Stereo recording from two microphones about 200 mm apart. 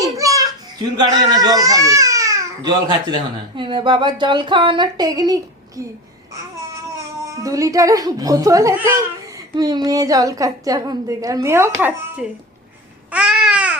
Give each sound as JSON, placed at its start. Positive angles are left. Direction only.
{"t": 0.0, "sound": "children playing", "side_deg": -15}
{"t": 1.0, "sound": "speech", "side_deg": -20}
{"t": 7.3, "sound": "a woman's voice", "side_deg": -15}
{"t": 13.1, "sound": "babbling", "side_deg": -5}